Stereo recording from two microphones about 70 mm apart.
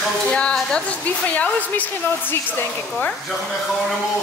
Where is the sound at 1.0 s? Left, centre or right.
Centre.